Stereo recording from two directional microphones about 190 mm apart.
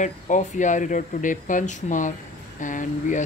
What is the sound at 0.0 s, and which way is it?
Speech, 40° left (ahead or behind).